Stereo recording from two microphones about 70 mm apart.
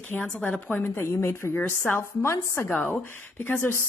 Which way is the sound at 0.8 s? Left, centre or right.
Left.